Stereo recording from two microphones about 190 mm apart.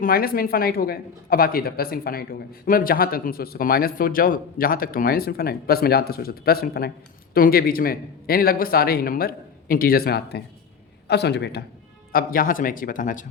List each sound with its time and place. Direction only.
0.0 s a man's voice: 50° left (ahead or behind)
12.1 s speech: 45° left (ahead or behind)